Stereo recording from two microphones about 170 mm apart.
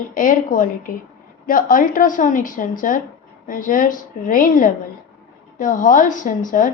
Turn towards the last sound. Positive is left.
turn(degrees=50)  # may be behind; listen again after turning